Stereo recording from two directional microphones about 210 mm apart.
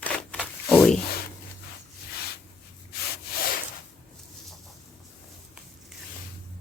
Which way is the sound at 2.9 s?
45° left (ahead or behind).